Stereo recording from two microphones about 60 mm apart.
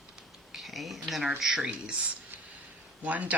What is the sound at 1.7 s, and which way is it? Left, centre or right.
Speech, right.